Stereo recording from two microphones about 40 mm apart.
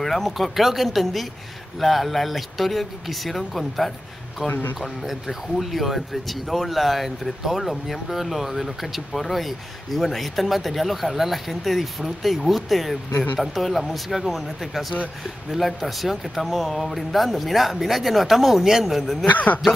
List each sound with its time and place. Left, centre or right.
0.0 s speech: centre
4.5 s a man's voice: left
4.7 s speech: centre
19.2 s a man's voice: left